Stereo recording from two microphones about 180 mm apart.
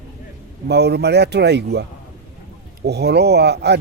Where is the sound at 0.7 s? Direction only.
65° right (ahead or behind).